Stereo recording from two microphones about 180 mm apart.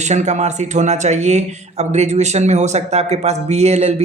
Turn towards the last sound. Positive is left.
turn(degrees=-35)  # may be behind; listen again after turning